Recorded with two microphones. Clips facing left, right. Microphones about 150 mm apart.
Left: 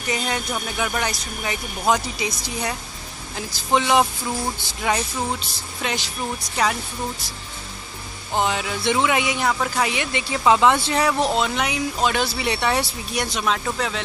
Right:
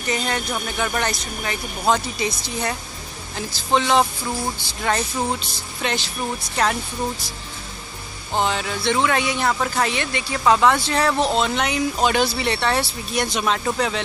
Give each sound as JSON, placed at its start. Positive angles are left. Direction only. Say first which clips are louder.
{"t": 0.1, "sound": "speech", "louder": "right 1 dB", "side_deg": 5}
{"t": 8.4, "sound": "speech", "louder": "even", "side_deg": 10}
{"t": 12.4, "sound": "speech", "louder": "right 1 dB", "side_deg": 10}